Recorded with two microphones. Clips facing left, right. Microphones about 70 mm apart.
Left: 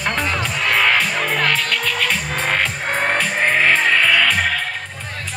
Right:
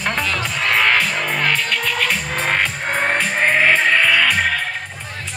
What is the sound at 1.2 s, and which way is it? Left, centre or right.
Music, centre.